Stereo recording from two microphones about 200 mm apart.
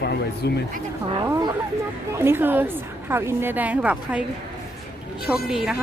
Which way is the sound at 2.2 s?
10° right (ahead or behind).